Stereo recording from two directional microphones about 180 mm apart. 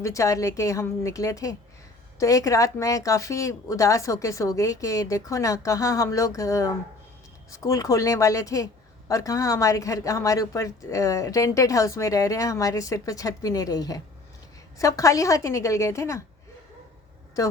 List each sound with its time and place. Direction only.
0.0 s speech: 15° left (ahead or behind)
17.4 s a man's voice: 20° left (ahead or behind)